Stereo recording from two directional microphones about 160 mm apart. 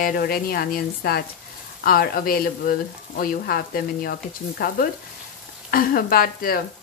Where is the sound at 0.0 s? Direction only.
65° left (ahead or behind).